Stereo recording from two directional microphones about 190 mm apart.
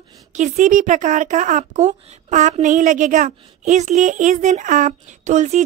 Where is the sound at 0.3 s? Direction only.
40° right (ahead or behind).